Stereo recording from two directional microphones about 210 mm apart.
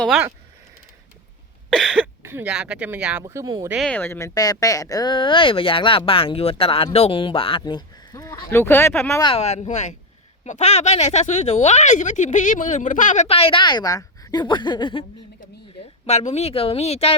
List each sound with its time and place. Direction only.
0.0 s speech: centre (ahead or behind)
1.8 s speech: 5° right (ahead or behind)
3.7 s speech: centre (ahead or behind)
9.3 s speech: 30° left (ahead or behind)
16.0 s speech: 30° left (ahead or behind)